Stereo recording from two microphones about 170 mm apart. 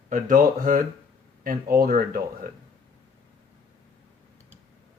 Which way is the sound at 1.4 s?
60° right (ahead or behind).